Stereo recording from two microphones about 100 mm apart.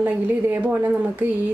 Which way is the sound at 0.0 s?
15° right (ahead or behind).